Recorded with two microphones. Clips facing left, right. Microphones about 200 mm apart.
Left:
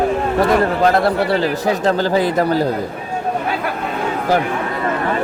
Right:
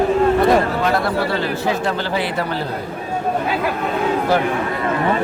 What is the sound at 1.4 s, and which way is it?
Speech, 40° left (ahead or behind).